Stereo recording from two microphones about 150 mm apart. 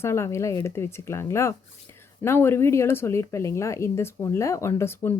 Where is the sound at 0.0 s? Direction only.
15° left (ahead or behind).